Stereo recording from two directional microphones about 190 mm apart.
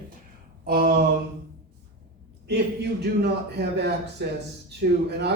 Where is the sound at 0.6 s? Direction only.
50° right (ahead or behind).